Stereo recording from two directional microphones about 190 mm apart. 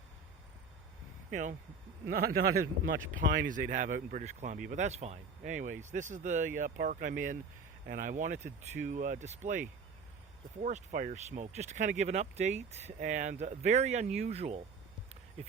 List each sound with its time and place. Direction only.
1.3 s speech: 40° right (ahead or behind)
2.0 s speech: 55° right (ahead or behind); by 14.6 s 35° right (ahead or behind)